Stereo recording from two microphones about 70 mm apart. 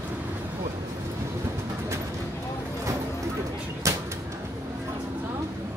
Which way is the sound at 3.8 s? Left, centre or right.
Right.